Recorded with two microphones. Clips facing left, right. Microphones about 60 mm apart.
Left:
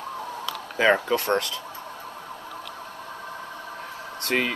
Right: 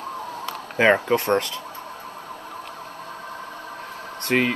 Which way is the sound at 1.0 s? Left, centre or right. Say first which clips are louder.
Right 3 dB; right.